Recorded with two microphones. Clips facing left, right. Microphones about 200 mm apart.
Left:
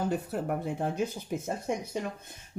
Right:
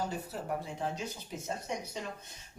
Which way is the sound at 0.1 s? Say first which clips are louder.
Left 6 dB; 55° left (ahead or behind).